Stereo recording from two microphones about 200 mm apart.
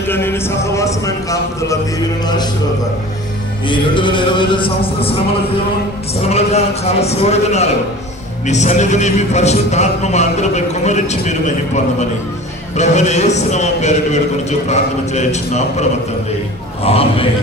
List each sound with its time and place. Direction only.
0.1 s speech: 10° left (ahead or behind)
3.6 s speech: 25° left (ahead or behind)
6.2 s speech: 30° left (ahead or behind)
16.8 s speech: 30° left (ahead or behind)